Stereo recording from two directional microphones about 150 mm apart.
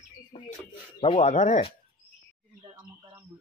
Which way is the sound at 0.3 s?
35° left (ahead or behind).